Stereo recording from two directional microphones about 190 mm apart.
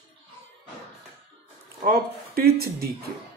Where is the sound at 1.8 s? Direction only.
55° right (ahead or behind).